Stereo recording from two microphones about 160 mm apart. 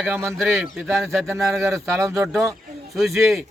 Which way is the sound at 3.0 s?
Centre (ahead or behind).